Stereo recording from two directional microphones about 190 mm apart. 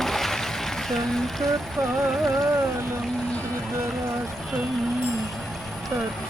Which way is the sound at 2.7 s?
15° right (ahead or behind).